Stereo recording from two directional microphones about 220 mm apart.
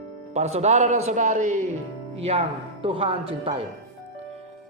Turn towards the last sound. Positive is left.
turn(degrees=-25)  # may be behind; listen again after turning